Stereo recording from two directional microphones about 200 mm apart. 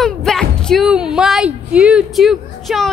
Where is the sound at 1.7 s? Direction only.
5° right (ahead or behind).